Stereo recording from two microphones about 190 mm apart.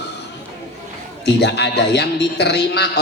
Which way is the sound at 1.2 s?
60° left (ahead or behind).